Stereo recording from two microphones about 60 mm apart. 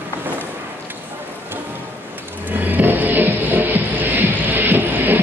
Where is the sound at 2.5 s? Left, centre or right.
Right.